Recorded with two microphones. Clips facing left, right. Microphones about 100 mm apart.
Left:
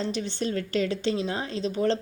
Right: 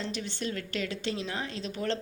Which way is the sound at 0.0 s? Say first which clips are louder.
Left 6 dB; 30° left (ahead or behind).